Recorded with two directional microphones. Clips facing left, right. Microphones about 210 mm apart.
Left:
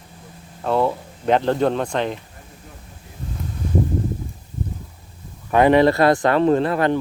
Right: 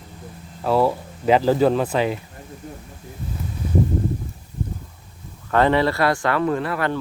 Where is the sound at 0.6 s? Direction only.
5° right (ahead or behind).